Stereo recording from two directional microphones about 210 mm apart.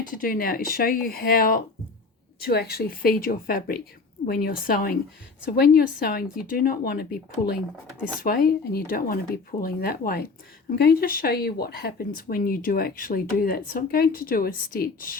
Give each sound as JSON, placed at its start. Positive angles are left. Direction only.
{"t": 0.0, "sound": "speech", "side_deg": 40}